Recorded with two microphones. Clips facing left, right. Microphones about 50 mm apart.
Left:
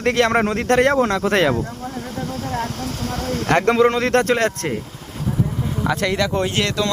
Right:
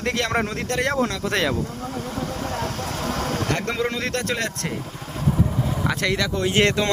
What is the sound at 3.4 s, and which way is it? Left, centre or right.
Speech, left.